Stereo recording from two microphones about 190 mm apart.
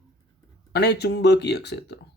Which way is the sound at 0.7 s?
60° left (ahead or behind).